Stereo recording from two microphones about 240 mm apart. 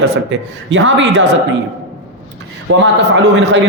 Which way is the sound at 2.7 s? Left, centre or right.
Right.